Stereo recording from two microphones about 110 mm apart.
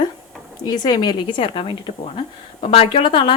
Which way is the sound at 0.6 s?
40° left (ahead or behind).